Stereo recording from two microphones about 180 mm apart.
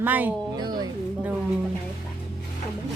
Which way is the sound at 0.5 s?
25° right (ahead or behind).